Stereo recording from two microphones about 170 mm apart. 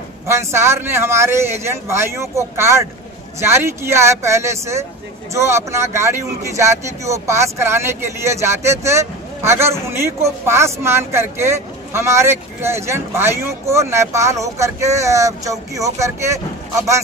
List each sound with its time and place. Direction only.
0.3 s speech: 15° right (ahead or behind)